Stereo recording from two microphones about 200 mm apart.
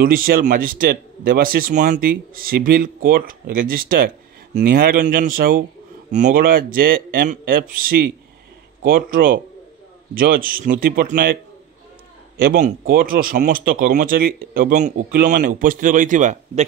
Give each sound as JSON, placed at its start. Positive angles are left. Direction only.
{"t": 0.0, "sound": "speech", "side_deg": -45}
{"t": 12.4, "sound": "speech", "side_deg": -45}